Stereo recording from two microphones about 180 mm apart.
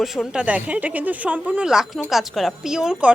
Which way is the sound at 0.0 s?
Centre (ahead or behind).